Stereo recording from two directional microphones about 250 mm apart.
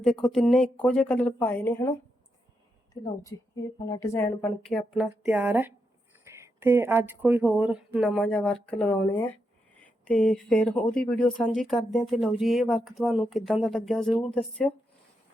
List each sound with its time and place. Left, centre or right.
0.0 s speech: centre
3.2 s a woman's voice: centre